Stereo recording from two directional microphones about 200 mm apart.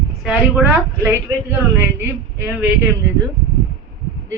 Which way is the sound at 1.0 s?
10° right (ahead or behind).